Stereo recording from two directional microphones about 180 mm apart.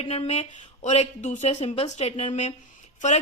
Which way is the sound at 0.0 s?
35° left (ahead or behind).